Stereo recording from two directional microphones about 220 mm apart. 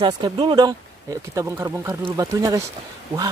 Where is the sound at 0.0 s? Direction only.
20° right (ahead or behind).